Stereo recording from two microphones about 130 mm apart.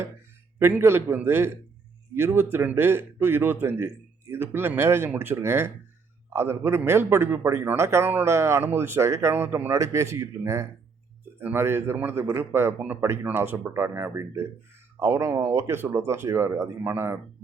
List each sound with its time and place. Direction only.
0.6 s a man's voice: 20° right (ahead or behind)